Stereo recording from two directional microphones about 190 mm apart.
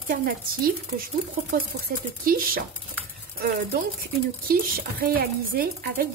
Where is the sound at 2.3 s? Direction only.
50° right (ahead or behind).